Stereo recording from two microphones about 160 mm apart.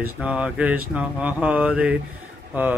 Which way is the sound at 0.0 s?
10° right (ahead or behind).